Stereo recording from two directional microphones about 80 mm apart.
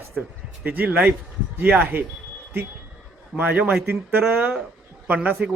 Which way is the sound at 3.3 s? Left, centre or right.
Centre.